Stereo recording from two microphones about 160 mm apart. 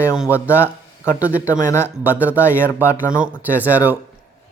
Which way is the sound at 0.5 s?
15° left (ahead or behind).